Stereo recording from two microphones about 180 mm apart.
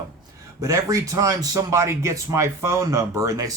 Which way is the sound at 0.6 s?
20° right (ahead or behind).